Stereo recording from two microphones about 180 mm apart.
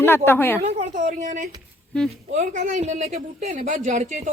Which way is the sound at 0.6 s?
40° right (ahead or behind).